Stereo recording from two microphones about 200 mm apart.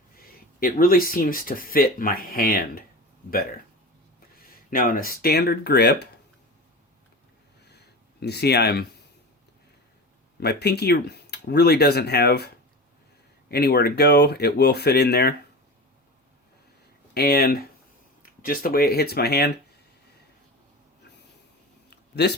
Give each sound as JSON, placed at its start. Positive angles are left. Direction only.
{"t": 0.3, "sound": "speech", "side_deg": 45}
{"t": 4.4, "sound": "speech", "side_deg": 45}
{"t": 8.2, "sound": "speech", "side_deg": 55}
{"t": 10.4, "sound": "speech", "side_deg": 55}
{"t": 13.5, "sound": "speech", "side_deg": 50}
{"t": 17.2, "sound": "speech", "side_deg": 50}
{"t": 21.8, "sound": "a sound", "side_deg": 55}